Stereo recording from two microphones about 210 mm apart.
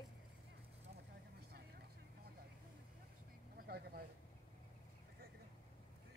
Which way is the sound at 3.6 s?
45° right (ahead or behind).